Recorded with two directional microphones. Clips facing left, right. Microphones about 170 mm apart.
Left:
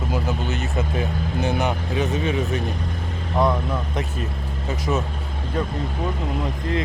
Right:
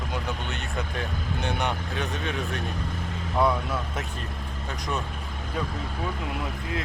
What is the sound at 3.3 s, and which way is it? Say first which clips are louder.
Speech: left 3 dB; 15° left (ahead or behind).